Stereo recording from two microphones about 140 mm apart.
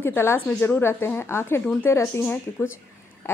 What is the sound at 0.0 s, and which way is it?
A woman's voice, 15° left (ahead or behind).